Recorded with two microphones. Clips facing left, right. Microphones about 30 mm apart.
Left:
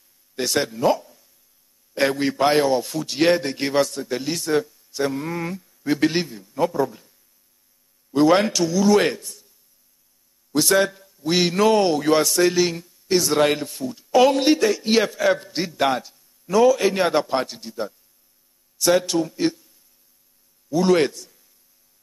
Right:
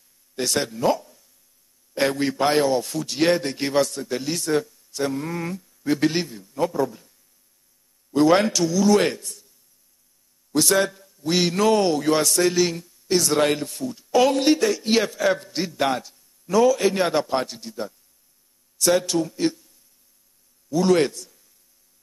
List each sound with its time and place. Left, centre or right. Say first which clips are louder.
0.4 s a man's voice: left 2 dB; centre
10.5 s a man's voice: left 2 dB; centre
20.7 s a man's voice: left 1 dB; centre